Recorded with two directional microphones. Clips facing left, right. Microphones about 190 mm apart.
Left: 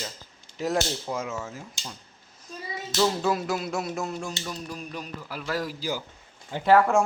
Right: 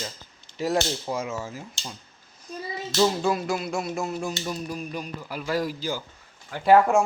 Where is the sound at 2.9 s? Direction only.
10° right (ahead or behind).